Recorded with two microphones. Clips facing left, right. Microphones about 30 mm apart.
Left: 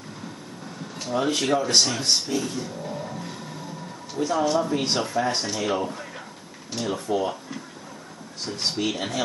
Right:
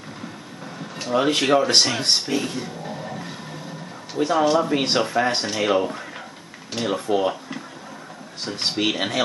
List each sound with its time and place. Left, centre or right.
0.9 s speech: right
2.8 s vehicle: right
4.1 s speech: right